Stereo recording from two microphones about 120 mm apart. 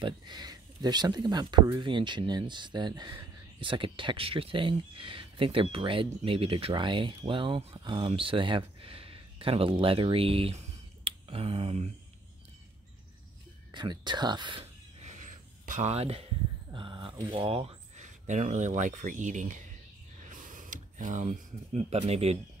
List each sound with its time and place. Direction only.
0.0 s speech: 35° right (ahead or behind); by 11.9 s 60° right (ahead or behind)
13.7 s speech: 40° right (ahead or behind)
15.0 s a sound: 90° right; by 16.3 s 55° right (ahead or behind)
16.7 s speech: 45° right (ahead or behind)
17.9 s speech: 90° right
20.2 s a sound: 90° right
21.9 s speech: 60° right (ahead or behind)